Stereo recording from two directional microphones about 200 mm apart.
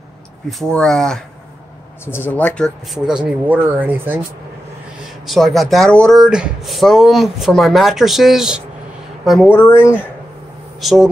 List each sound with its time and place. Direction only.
0.5 s speech: centre (ahead or behind)
5.2 s a woman's voice: centre (ahead or behind)
9.5 s speech: 10° left (ahead or behind)
10.8 s speech: centre (ahead or behind)